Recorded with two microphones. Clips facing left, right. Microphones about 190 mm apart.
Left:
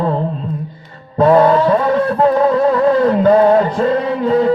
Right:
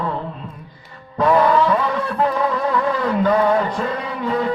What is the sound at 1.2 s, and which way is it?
Music, 30° left (ahead or behind).